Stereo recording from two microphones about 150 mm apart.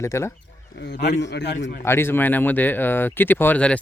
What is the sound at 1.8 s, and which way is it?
Speech, 15° left (ahead or behind).